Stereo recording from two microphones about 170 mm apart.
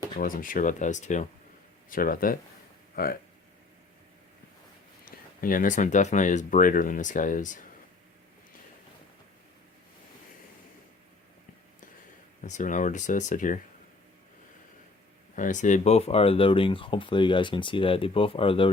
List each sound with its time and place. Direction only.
0.2 s speech: 55° left (ahead or behind)
1.9 s speech: 55° left (ahead or behind)
5.0 s speech: 55° left (ahead or behind)
12.4 s speech: 45° left (ahead or behind)
15.4 s speech: 45° left (ahead or behind); by 18.7 s 30° left (ahead or behind)